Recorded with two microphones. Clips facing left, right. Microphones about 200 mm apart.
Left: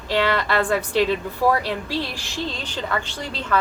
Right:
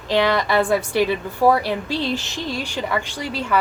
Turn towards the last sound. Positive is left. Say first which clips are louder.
# right 2 dB
turn(degrees=-10)  # may be behind; listen again after turning